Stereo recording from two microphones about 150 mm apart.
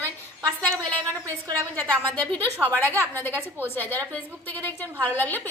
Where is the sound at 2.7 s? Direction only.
10° left (ahead or behind).